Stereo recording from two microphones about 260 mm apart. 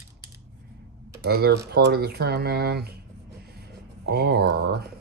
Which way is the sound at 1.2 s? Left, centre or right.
Right.